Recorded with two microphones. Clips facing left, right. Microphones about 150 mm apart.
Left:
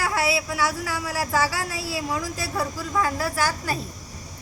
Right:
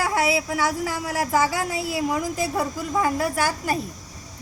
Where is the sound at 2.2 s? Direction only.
20° right (ahead or behind).